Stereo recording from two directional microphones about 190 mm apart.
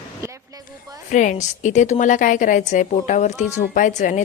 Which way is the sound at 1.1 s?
40° left (ahead or behind).